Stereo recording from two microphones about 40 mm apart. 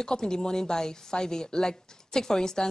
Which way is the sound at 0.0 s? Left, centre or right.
Centre.